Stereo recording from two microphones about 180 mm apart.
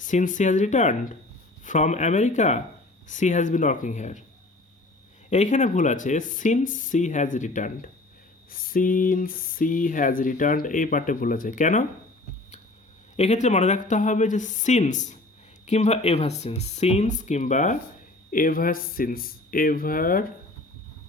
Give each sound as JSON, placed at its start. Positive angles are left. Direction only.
{"t": 0.0, "sound": "speech", "side_deg": 45}
{"t": 5.3, "sound": "speech", "side_deg": 40}
{"t": 13.1, "sound": "speech", "side_deg": 40}